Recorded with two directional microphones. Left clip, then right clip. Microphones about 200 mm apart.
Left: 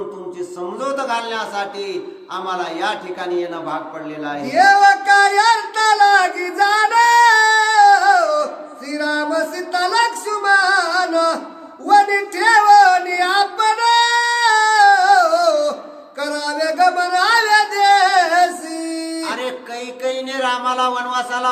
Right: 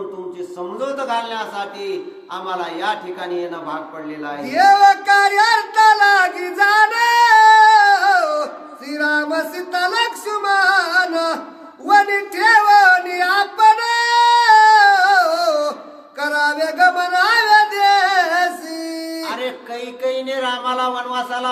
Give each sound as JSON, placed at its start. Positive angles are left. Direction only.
{"t": 0.8, "sound": "a sound", "side_deg": 10}
{"t": 4.4, "sound": "music", "side_deg": -20}
{"t": 8.9, "sound": "singing", "side_deg": -20}
{"t": 16.2, "sound": "music", "side_deg": -15}
{"t": 19.3, "sound": "music", "side_deg": 10}
{"t": 20.0, "sound": "a sound", "side_deg": 10}